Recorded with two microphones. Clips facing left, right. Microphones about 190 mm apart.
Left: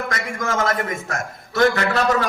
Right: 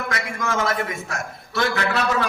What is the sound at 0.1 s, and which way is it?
A man's voice, 45° left (ahead or behind).